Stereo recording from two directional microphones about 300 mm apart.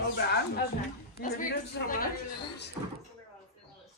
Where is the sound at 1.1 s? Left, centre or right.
Left.